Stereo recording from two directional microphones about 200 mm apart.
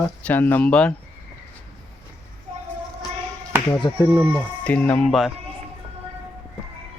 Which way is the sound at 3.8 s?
20° left (ahead or behind).